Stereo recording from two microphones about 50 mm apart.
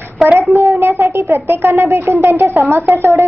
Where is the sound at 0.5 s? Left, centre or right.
Right.